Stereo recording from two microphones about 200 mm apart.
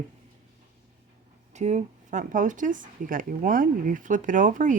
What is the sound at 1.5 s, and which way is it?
Speech, 35° right (ahead or behind).